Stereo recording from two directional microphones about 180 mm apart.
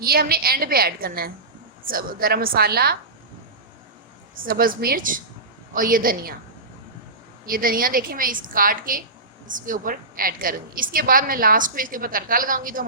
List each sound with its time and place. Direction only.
0.0 s a woman's voice: 55° right (ahead or behind)
4.4 s a woman's voice: 55° right (ahead or behind)
7.4 s a woman's voice: 50° right (ahead or behind)